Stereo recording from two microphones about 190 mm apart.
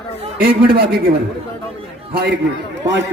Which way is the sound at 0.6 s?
55° right (ahead or behind).